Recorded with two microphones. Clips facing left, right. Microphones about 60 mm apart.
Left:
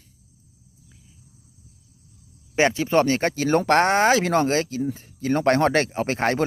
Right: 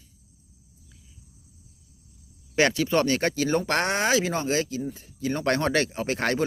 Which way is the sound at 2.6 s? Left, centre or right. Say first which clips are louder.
Left 3 dB; left.